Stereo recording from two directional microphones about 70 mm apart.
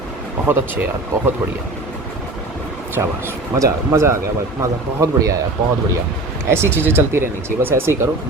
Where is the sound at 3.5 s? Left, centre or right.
Right.